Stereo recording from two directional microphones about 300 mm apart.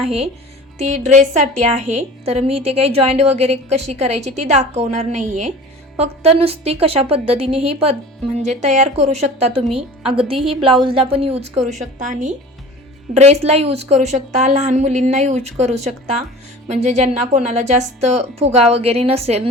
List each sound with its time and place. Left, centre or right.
0.0 s a woman's voice: centre